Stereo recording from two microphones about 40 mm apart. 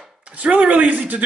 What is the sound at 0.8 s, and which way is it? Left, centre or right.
Speech, right.